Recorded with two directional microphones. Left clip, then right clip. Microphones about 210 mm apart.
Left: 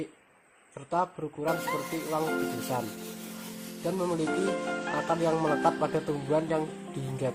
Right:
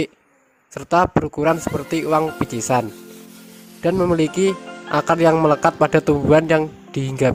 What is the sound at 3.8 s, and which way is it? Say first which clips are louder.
Speech: right 13 dB; 55° right (ahead or behind).